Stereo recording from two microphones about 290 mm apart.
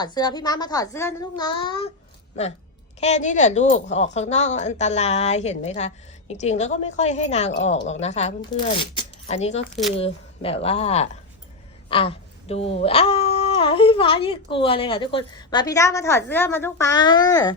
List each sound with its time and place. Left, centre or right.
0.0 s a woman's voice: centre
3.0 s speech: left